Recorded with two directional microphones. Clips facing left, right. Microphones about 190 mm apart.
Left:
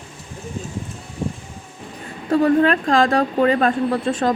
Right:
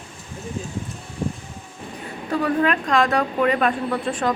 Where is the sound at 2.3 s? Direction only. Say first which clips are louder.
Left 5 dB; 35° left (ahead or behind).